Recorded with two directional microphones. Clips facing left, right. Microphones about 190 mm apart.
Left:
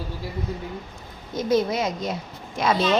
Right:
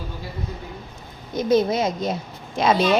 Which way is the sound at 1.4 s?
25° right (ahead or behind).